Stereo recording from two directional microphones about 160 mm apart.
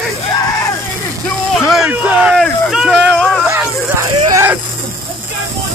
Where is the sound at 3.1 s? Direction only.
5° left (ahead or behind).